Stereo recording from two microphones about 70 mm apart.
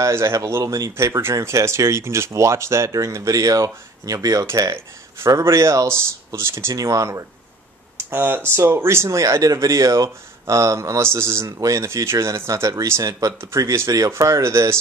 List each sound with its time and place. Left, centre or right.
0.0 s speech: right
5.3 s speech: right
6.7 s speech: right
8.0 s speech: right